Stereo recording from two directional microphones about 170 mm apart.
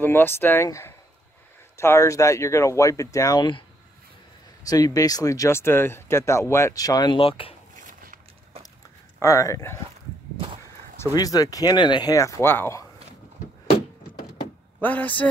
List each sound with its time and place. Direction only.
0.0 s speech: 10° left (ahead or behind)
4.6 s speech: 20° left (ahead or behind)
7.8 s a sound: 55° right (ahead or behind)
9.2 s speech: 20° left (ahead or behind)
11.0 s speech: 20° left (ahead or behind)
14.8 s speech: 10° left (ahead or behind)